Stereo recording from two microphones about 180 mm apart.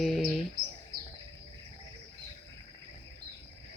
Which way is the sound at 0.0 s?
Centre (ahead or behind).